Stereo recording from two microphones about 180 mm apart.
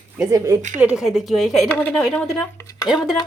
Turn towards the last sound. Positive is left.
turn(degrees=0)  # may be behind; listen again after turning